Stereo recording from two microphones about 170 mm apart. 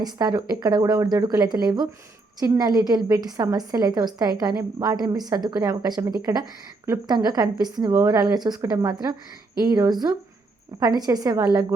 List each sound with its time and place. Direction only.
0.0 s a woman's voice: 20° right (ahead or behind)